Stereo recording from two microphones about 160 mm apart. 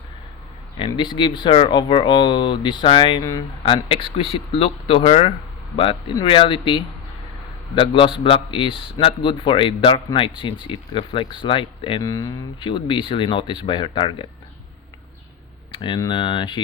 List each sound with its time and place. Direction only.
0.9 s speech: 30° left (ahead or behind)
3.8 s a man's voice: 35° left (ahead or behind)
12.0 s a man's voice: 20° left (ahead or behind)
15.7 s speech: 30° left (ahead or behind)